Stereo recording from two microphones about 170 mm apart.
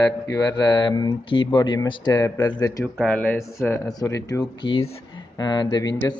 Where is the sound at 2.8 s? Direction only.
10° left (ahead or behind).